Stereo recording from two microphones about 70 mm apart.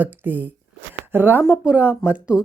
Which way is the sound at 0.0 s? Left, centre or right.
Right.